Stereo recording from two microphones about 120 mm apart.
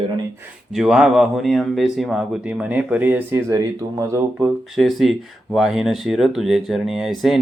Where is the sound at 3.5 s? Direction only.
25° right (ahead or behind).